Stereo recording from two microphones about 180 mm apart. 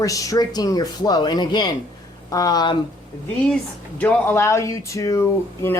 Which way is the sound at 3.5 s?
10° left (ahead or behind).